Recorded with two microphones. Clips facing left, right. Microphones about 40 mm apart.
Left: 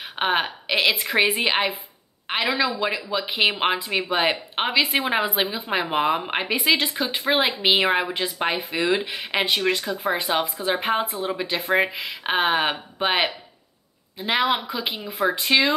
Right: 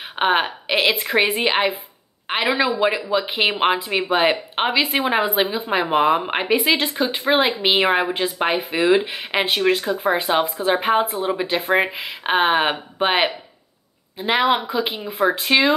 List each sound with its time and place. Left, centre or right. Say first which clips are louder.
0.1 s speech: right 4 dB; centre
2.2 s speech: right 3 dB; centre
14.7 s speech: right 5 dB; centre